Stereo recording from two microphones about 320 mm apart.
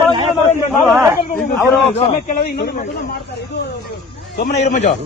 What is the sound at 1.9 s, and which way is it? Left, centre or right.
Speech, left.